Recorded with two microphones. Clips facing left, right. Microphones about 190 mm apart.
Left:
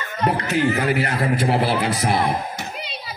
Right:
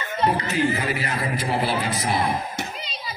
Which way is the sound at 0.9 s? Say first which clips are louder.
Left 6 dB; 70° left (ahead or behind).